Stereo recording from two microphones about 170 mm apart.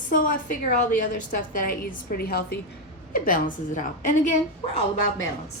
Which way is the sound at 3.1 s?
55° left (ahead or behind).